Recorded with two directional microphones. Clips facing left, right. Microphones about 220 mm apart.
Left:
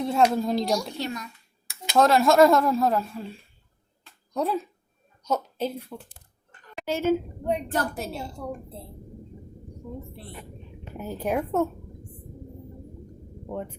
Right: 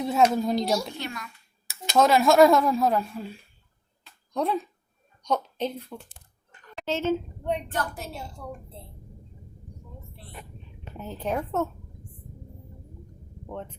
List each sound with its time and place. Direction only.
0.0 s speech: centre (ahead or behind)
0.9 s a child's voice: 35° left (ahead or behind)
1.6 s a woman's voice: centre (ahead or behind)
7.7 s a child's voice: 35° left (ahead or behind)
10.9 s a woman's voice: 10° left (ahead or behind)
13.5 s a woman's voice: 10° left (ahead or behind)